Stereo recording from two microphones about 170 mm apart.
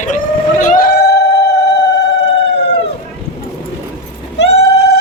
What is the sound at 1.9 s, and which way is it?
Police car, 90° left.